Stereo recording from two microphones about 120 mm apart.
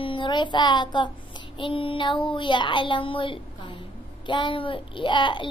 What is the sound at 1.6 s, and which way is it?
A child's voice, 50° left (ahead or behind).